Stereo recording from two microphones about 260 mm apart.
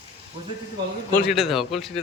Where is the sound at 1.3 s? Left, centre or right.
Centre.